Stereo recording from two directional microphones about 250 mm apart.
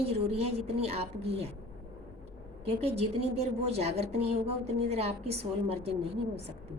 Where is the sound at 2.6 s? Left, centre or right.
Right.